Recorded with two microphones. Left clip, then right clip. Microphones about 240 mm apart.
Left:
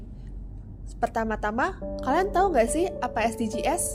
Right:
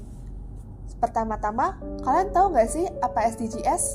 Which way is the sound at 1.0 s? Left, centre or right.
Left.